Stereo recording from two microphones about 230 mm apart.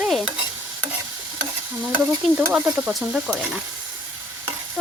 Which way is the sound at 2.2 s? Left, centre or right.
Centre.